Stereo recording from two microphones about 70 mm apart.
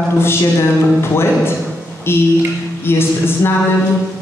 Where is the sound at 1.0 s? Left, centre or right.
Left.